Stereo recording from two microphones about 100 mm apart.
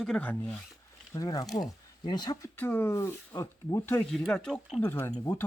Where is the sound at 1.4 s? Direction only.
Centre (ahead or behind).